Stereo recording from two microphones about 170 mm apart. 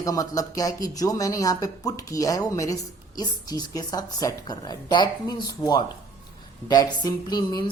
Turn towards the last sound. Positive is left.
turn(degrees=25)  # may be behind; listen again after turning